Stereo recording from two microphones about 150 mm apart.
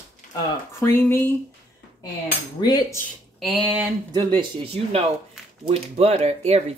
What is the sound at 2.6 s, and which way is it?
Cutlery, 25° left (ahead or behind).